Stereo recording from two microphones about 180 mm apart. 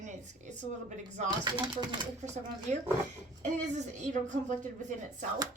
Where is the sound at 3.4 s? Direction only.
40° right (ahead or behind).